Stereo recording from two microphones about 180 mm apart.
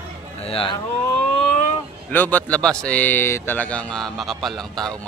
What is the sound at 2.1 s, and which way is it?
Speech, 10° left (ahead or behind).